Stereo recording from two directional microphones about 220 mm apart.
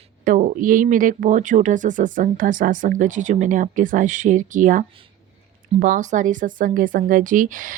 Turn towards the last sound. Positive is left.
turn(degrees=-35)  # may be behind; listen again after turning